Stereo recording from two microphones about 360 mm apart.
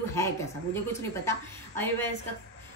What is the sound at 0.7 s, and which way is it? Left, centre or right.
A woman's voice, centre.